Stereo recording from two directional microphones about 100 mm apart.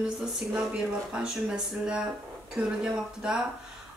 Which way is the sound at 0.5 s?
10° right (ahead or behind).